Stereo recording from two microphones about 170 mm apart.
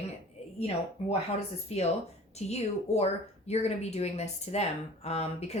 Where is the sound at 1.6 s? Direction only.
40° left (ahead or behind).